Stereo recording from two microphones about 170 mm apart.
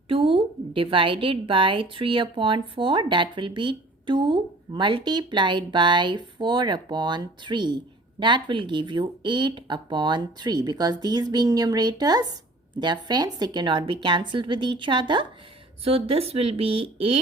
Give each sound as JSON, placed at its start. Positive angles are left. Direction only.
{"t": 0.1, "sound": "a woman's voice", "side_deg": -30}